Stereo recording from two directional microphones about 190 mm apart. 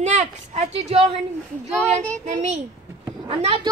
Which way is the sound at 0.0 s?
35° right (ahead or behind).